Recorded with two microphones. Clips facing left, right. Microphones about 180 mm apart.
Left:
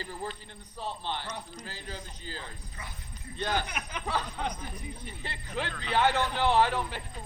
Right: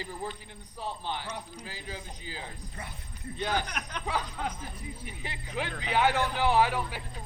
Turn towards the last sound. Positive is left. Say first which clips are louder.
# even
turn(degrees=-10)  # may be behind; listen again after turning